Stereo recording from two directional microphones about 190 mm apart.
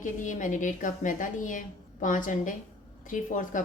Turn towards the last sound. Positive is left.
turn(degrees=45)  # may be behind; listen again after turning